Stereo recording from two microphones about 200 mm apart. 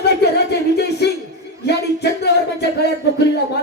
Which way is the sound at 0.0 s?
55° left (ahead or behind).